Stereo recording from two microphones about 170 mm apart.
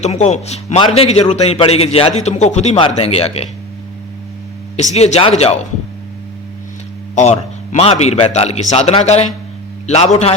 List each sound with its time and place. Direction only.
0.0 s a man's voice: 40° left (ahead or behind)
4.8 s a man's voice: 40° left (ahead or behind)
7.2 s a man's voice: 45° left (ahead or behind)